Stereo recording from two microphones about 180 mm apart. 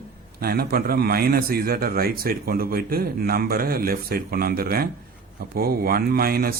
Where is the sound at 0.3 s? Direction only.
55° right (ahead or behind).